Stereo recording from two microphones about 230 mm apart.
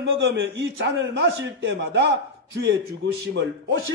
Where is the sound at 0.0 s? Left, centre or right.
Right.